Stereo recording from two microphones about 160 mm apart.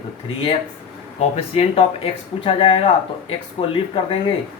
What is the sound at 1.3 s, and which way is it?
Speech, 40° left (ahead or behind).